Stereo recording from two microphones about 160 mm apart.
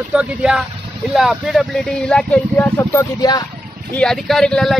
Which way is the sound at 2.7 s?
20° left (ahead or behind).